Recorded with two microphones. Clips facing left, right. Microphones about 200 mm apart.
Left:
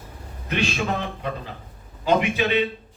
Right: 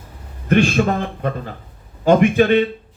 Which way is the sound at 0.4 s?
50° right (ahead or behind).